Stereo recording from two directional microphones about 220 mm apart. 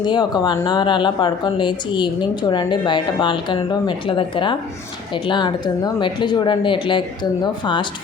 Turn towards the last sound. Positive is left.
turn(degrees=20)  # may be behind; listen again after turning